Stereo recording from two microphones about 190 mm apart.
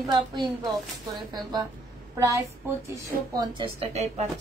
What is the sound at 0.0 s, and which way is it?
Speech, 25° right (ahead or behind).